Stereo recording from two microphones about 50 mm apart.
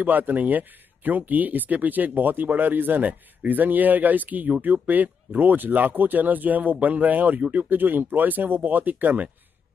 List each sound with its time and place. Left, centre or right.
0.0 s speech: right